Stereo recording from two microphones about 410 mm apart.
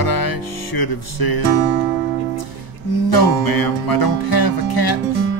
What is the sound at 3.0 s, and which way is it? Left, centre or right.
Music, left.